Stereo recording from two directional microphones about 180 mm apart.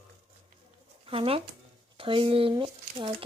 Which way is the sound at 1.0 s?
30° right (ahead or behind).